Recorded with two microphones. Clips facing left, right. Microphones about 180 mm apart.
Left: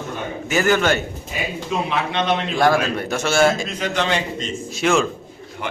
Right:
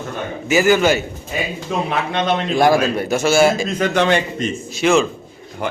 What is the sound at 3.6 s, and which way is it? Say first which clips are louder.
Speech: right 6 dB; 50° right (ahead or behind).